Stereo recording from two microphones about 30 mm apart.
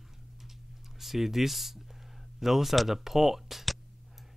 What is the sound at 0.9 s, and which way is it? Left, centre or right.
Speech, centre.